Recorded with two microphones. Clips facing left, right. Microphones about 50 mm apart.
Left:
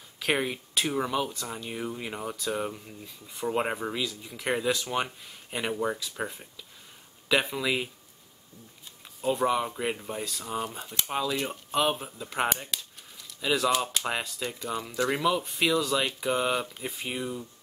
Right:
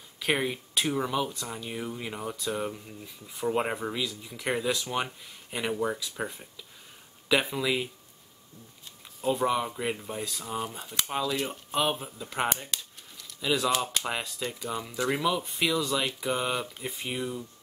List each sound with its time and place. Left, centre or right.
0.2 s speech: centre
9.2 s speech: centre